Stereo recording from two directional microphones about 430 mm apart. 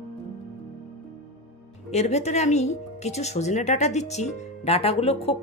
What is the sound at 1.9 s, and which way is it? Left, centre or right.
Speech, centre.